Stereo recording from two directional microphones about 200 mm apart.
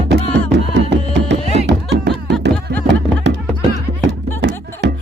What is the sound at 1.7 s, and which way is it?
Music, 60° right (ahead or behind).